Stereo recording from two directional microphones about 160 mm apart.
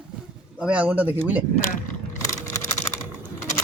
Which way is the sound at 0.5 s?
5° right (ahead or behind).